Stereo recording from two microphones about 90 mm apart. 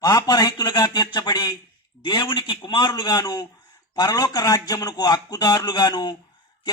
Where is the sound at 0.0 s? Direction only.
50° left (ahead or behind).